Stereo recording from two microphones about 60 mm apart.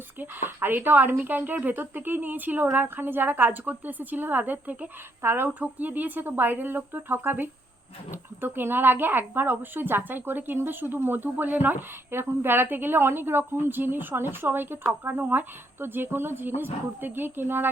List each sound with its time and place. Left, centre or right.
0.2 s speech: right
5.2 s speech: right
5.5 s speech: right